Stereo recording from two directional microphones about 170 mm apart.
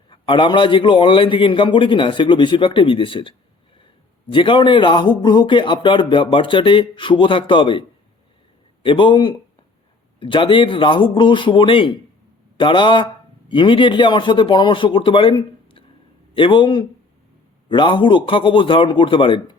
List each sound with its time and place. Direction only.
0.1 s speech: 30° left (ahead or behind)